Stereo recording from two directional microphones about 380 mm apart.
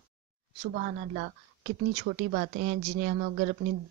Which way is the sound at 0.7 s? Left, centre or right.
Right.